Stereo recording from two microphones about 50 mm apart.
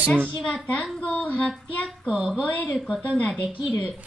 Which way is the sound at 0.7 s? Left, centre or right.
Left.